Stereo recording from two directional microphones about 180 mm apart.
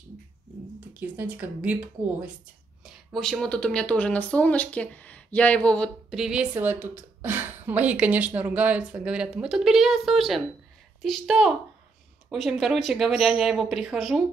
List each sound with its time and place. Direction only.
0.9 s speech: 10° right (ahead or behind)